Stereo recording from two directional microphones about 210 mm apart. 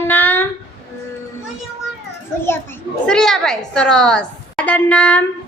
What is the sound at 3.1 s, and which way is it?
A woman's voice, centre (ahead or behind).